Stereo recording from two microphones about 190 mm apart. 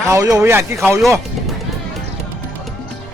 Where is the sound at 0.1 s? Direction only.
15° right (ahead or behind).